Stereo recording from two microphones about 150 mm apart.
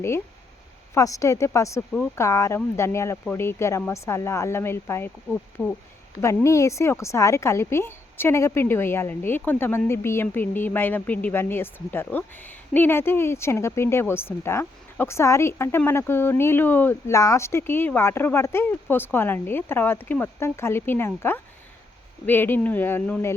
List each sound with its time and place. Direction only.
0.9 s a woman's voice: 20° left (ahead or behind)